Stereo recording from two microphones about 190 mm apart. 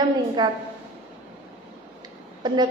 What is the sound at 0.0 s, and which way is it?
Speech, 20° right (ahead or behind).